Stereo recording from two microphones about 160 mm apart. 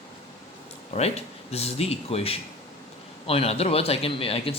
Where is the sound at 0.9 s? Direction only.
40° left (ahead or behind).